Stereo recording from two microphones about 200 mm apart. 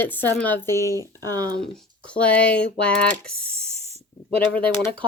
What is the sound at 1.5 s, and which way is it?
A woman's voice, 5° left (ahead or behind).